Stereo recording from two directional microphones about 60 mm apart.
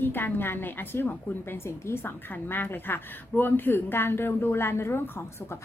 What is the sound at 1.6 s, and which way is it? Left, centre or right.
Speech, left.